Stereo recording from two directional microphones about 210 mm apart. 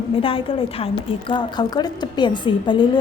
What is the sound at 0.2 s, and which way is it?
A woman's voice, 25° left (ahead or behind).